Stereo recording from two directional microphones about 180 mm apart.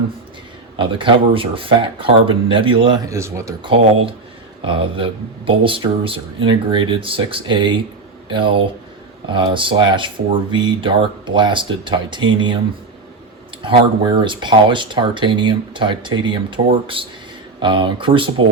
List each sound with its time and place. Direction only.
0.8 s speech: 30° right (ahead or behind)
3.1 s speech: 15° right (ahead or behind)
4.6 s speech: 30° right (ahead or behind)
13.6 s speech: 30° right (ahead or behind)